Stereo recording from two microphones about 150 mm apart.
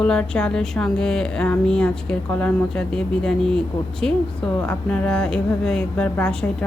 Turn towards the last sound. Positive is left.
turn(degrees=5)  # may be behind; listen again after turning